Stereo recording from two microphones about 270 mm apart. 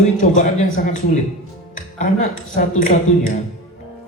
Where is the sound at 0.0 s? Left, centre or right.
Left.